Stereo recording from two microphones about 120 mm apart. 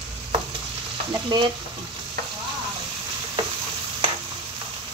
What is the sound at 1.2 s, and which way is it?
Child singing, 40° right (ahead or behind).